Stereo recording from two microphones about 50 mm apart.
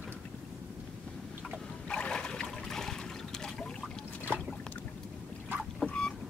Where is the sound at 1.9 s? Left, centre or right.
Left.